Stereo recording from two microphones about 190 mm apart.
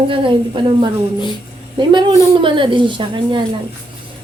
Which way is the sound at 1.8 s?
25° right (ahead or behind).